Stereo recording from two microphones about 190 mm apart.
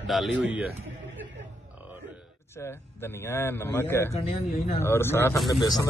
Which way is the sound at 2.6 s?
15° left (ahead or behind).